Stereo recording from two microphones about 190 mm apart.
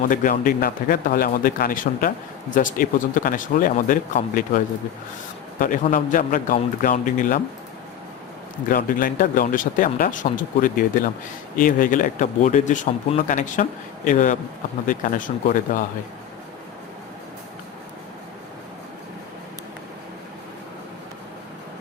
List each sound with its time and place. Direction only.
0.1 s a man's voice: 45° left (ahead or behind)
8.7 s a man's voice: 45° left (ahead or behind)